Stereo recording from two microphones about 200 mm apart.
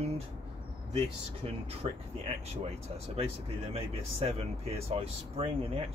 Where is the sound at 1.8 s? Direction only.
30° right (ahead or behind).